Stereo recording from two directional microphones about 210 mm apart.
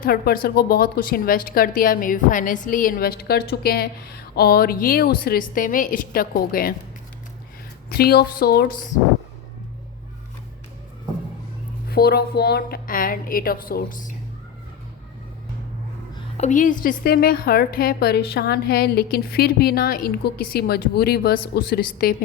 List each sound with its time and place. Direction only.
0.0 s speech: 45° left (ahead or behind)
7.9 s speech: 45° left (ahead or behind)
11.9 s speech: 50° left (ahead or behind)
16.4 s speech: 35° left (ahead or behind)